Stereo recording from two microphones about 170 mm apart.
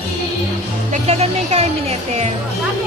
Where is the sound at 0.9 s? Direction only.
40° right (ahead or behind).